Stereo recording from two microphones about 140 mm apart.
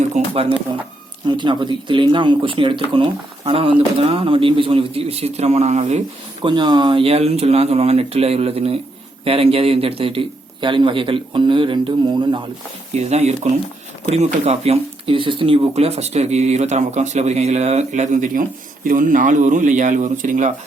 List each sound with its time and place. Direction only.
0.7 s speech: 35° right (ahead or behind); by 5.8 s 55° right (ahead or behind)
6.4 s speech: 35° right (ahead or behind)
12.9 s speech: 50° right (ahead or behind)